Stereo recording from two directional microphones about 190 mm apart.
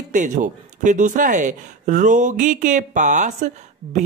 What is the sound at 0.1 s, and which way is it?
Speech, 40° right (ahead or behind).